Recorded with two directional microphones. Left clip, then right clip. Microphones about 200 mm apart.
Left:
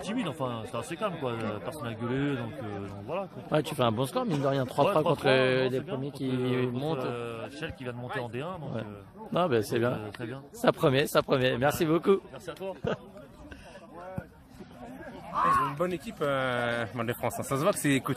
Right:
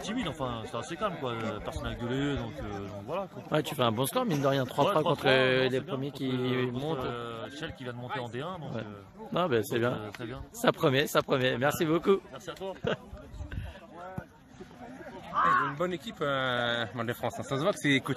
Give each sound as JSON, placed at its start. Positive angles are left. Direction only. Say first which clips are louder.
{"t": 0.0, "sound": "speech", "louder": "left 1 dB", "side_deg": 5}
{"t": 15.3, "sound": "speech", "louder": "even", "side_deg": 50}
{"t": 15.8, "sound": "speech", "louder": "left 1 dB", "side_deg": 0}